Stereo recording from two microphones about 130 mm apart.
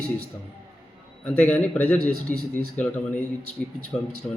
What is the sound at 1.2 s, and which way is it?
A man's voice, 10° left (ahead or behind).